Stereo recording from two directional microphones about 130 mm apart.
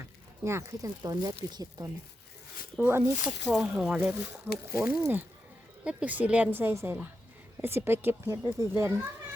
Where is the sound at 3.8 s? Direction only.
10° right (ahead or behind).